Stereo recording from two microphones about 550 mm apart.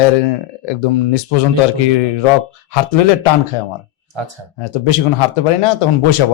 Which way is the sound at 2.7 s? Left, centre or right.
Left.